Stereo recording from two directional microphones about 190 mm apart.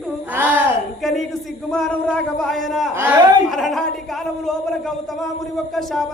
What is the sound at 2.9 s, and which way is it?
Music, 10° right (ahead or behind).